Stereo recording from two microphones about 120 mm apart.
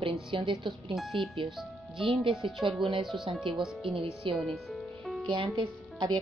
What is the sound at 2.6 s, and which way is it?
Speech, 45° right (ahead or behind).